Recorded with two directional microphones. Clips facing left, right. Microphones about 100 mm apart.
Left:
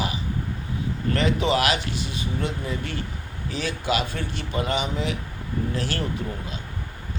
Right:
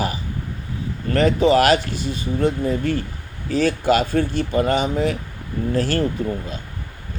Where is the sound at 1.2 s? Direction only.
45° right (ahead or behind).